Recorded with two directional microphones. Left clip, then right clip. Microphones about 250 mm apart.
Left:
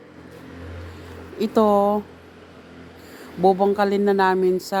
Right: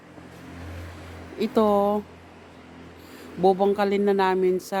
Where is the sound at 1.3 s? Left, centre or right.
Centre.